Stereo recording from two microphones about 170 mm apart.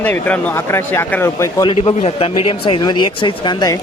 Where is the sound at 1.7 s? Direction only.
35° left (ahead or behind).